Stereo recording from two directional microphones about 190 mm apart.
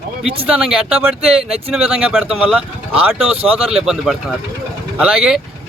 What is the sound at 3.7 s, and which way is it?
Speech, 5° right (ahead or behind).